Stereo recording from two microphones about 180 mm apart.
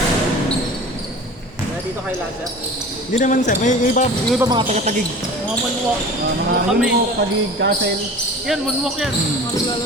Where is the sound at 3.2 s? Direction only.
45° left (ahead or behind).